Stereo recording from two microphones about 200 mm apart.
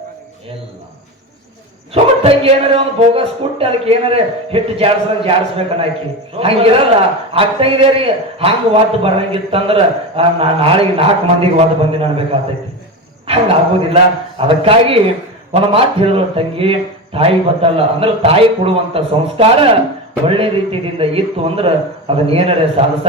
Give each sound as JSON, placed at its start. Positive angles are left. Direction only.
{"t": 1.9, "sound": "a man's voice", "side_deg": -30}